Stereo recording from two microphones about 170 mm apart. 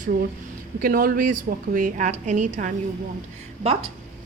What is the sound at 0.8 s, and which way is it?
Speech, 55° right (ahead or behind).